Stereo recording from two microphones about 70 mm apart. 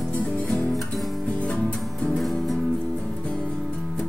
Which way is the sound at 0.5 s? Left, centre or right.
Centre.